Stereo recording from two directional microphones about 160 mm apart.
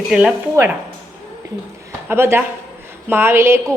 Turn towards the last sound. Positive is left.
turn(degrees=-15)  # may be behind; listen again after turning